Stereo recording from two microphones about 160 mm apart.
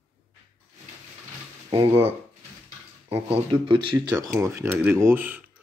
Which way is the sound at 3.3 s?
35° right (ahead or behind).